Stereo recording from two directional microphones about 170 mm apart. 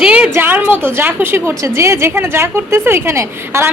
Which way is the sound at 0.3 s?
10° right (ahead or behind).